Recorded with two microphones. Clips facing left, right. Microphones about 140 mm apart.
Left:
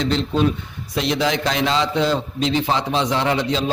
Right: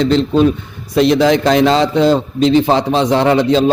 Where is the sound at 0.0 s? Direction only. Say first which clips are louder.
Right 8 dB; 40° right (ahead or behind).